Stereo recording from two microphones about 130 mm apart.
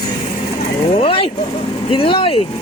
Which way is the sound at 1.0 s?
45° left (ahead or behind).